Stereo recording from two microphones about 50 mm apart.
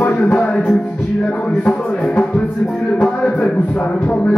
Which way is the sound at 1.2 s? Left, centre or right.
Left.